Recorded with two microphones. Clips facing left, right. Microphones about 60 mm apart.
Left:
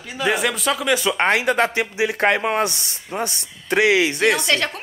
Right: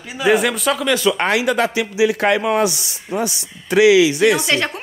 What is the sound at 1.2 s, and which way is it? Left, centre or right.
Speech, left.